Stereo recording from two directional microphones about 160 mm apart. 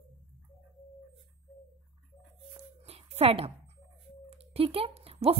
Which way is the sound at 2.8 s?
40° right (ahead or behind).